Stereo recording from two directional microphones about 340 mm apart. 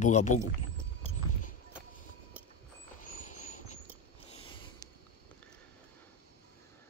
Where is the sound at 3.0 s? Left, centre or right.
Left.